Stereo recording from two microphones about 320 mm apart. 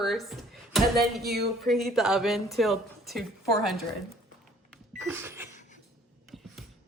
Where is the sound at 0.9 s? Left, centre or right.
Right.